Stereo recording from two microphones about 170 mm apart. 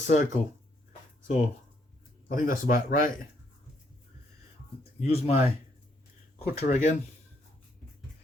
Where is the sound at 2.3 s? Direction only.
55° left (ahead or behind).